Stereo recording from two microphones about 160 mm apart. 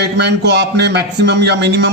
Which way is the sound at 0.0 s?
90° right.